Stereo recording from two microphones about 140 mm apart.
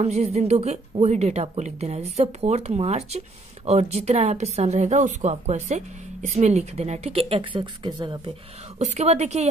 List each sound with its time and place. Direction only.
0.0 s speech: 50° right (ahead or behind); by 8.2 s 35° right (ahead or behind)
8.7 s speech: 55° right (ahead or behind)